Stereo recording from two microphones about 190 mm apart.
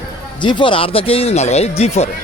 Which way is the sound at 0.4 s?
25° left (ahead or behind).